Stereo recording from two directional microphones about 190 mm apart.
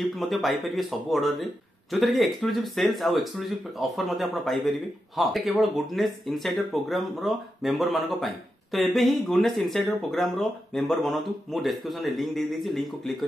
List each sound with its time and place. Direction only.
0.0 s speech: centre (ahead or behind)